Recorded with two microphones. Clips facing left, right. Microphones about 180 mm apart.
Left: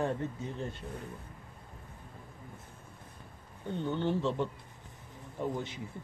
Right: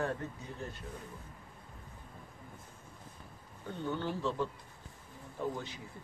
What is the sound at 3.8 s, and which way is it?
Speech, 25° left (ahead or behind).